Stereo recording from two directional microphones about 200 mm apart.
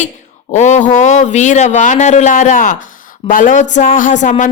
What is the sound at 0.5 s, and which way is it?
Speech, 35° left (ahead or behind).